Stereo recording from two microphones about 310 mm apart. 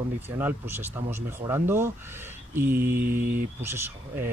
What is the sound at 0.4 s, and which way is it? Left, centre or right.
Speech, centre.